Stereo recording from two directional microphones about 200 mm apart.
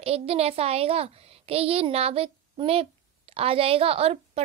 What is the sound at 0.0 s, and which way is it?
A child's voice, 30° right (ahead or behind).